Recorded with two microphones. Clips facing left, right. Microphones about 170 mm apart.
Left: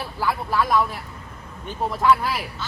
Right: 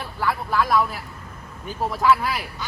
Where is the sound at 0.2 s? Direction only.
Centre (ahead or behind).